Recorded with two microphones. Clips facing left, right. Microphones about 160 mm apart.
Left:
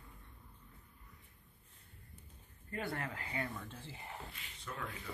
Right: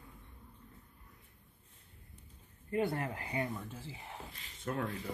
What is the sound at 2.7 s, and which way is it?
Speech, 25° right (ahead or behind).